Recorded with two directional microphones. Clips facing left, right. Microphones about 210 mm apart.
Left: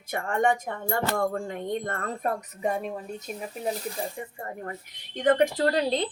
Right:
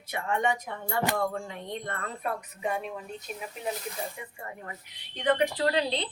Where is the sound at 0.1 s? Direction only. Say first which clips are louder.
Left 4 dB; 50° left (ahead or behind).